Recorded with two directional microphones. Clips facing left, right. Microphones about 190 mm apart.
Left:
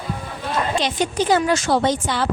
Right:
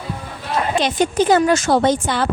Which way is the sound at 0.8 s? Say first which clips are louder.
Right 4 dB; 50° right (ahead or behind).